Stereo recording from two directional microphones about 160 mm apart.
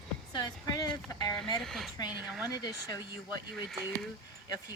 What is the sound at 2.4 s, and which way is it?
Speech, 25° left (ahead or behind).